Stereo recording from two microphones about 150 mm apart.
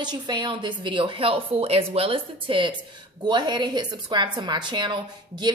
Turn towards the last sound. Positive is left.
turn(degrees=-30)  # may be behind; listen again after turning